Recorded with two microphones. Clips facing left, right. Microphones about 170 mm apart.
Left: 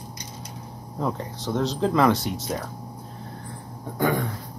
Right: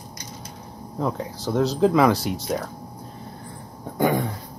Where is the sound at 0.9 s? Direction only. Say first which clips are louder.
Right 2 dB; centre (ahead or behind).